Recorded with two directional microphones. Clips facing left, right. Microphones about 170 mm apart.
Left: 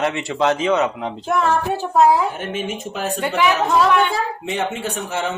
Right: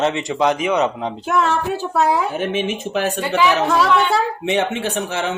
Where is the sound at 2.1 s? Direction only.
80° right.